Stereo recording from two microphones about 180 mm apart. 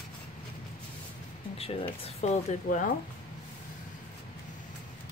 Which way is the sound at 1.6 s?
35° left (ahead or behind).